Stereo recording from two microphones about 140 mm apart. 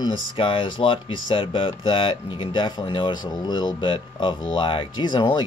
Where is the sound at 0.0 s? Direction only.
35° left (ahead or behind).